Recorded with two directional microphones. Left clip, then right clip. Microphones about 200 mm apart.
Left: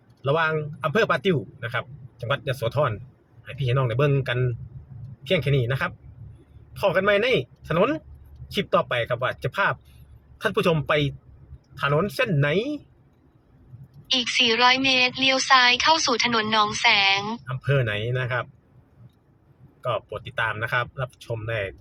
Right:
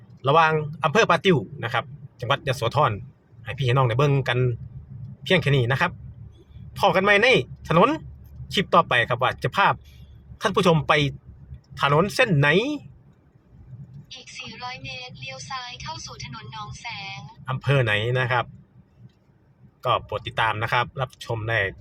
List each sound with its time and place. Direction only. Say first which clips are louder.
0.2 s speech: right 4 dB; 30° right (ahead or behind)
14.1 s a woman's voice: left 18 dB; 45° left (ahead or behind)
17.4 s speech: right 2 dB; 25° right (ahead or behind)
19.8 s speech: right 4 dB; 30° right (ahead or behind)